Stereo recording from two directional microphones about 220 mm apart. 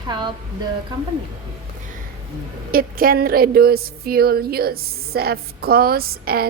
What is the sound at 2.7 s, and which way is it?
Speech, 40° right (ahead or behind).